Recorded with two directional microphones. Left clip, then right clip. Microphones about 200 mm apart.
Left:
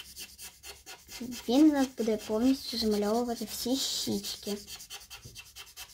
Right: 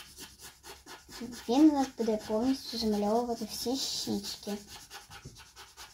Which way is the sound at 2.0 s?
30° left (ahead or behind).